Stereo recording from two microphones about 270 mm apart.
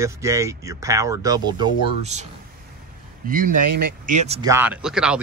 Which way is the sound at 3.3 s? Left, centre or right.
Right.